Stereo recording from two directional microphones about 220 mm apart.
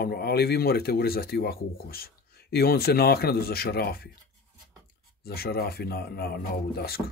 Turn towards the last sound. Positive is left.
turn(degrees=45)  # may be behind; listen again after turning